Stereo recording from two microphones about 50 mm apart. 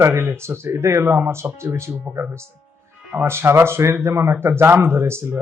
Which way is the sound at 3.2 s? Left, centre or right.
Right.